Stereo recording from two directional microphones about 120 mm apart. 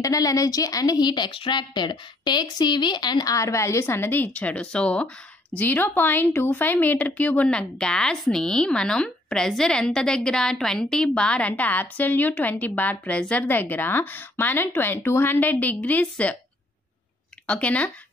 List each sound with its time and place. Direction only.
0.0 s speech: 30° left (ahead or behind); by 16.3 s 10° left (ahead or behind)
17.5 s speech: 10° left (ahead or behind)